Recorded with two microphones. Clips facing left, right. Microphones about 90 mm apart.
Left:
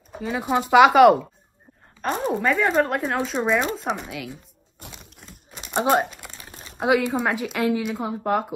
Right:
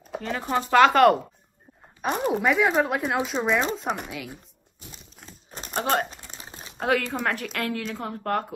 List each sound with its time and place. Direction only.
0.2 s a woman's voice: 10° left (ahead or behind)
2.0 s speech: 10° right (ahead or behind)
4.8 s crushing: 85° left
5.7 s a woman's voice: 20° left (ahead or behind)